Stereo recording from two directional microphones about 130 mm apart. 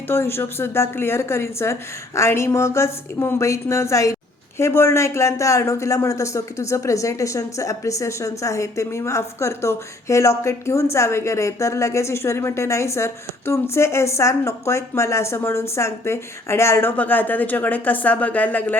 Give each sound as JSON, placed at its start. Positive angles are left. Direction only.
{"t": 0.1, "sound": "speech", "side_deg": 20}